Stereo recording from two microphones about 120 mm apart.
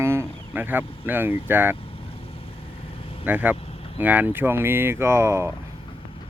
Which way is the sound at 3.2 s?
15° right (ahead or behind).